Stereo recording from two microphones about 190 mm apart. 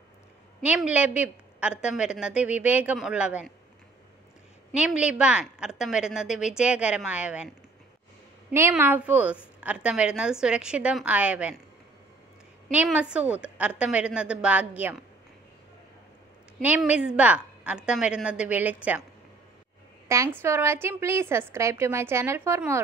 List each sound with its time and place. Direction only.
0.6 s a woman's voice: 5° right (ahead or behind)
4.7 s a woman's voice: 5° right (ahead or behind)
12.7 s a woman's voice: 5° right (ahead or behind)
16.5 s a woman's voice: 5° right (ahead or behind)
20.1 s a woman's voice: 15° right (ahead or behind)